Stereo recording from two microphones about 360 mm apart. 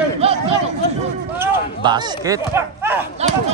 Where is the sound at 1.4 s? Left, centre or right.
Centre.